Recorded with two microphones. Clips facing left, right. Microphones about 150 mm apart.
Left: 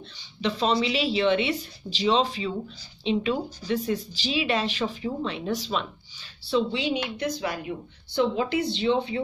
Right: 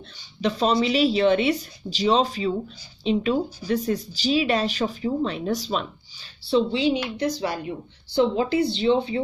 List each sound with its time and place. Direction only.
0.4 s speech: 45° right (ahead or behind)